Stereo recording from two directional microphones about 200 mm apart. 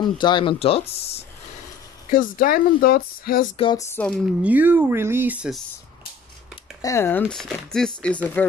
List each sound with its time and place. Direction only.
0.0 s speech: 20° left (ahead or behind)
2.0 s speech: 40° left (ahead or behind)
3.5 s speech: 25° left (ahead or behind)
3.9 s speech: 5° left (ahead or behind)
4.3 s speech: 5° right (ahead or behind)
6.8 s speech: 15° left (ahead or behind)